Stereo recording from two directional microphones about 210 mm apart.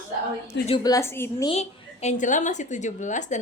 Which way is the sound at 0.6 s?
20° left (ahead or behind).